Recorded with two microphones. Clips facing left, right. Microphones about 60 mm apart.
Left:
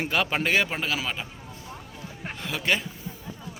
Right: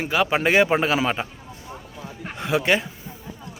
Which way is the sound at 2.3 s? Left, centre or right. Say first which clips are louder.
Right 6 dB; right.